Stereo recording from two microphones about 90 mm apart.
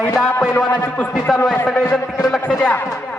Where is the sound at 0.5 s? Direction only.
25° left (ahead or behind).